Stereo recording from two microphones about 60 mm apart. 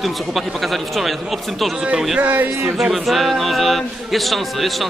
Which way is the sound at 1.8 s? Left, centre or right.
Centre.